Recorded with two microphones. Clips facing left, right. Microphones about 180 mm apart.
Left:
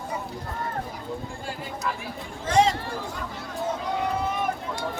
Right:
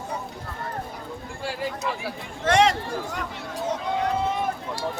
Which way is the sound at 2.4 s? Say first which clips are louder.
Right 2 dB; 75° right (ahead or behind).